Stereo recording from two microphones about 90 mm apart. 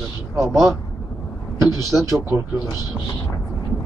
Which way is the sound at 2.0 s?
35° right (ahead or behind).